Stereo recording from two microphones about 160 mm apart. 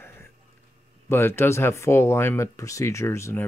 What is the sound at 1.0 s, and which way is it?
Speech, 15° left (ahead or behind).